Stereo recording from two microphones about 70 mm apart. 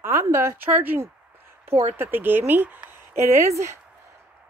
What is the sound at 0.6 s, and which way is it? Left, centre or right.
A woman's voice, right.